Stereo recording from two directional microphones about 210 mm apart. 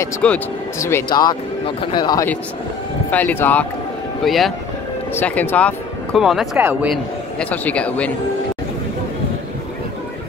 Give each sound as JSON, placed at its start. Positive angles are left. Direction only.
{"t": 0.0, "sound": "speech", "side_deg": 10}
{"t": 3.1, "sound": "speech", "side_deg": 10}
{"t": 7.3, "sound": "speech", "side_deg": 10}